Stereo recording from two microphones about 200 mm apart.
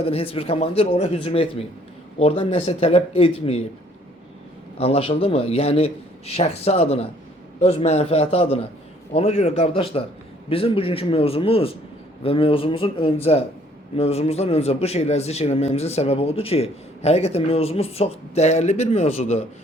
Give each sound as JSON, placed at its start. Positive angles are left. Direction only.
{"t": 0.0, "sound": "speech", "side_deg": 30}
{"t": 4.8, "sound": "speech", "side_deg": 30}